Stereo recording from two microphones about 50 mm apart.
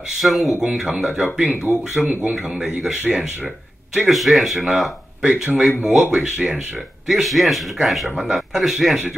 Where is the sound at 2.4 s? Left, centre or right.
Centre.